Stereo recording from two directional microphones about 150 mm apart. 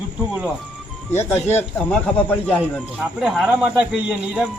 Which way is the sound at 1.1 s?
15° left (ahead or behind).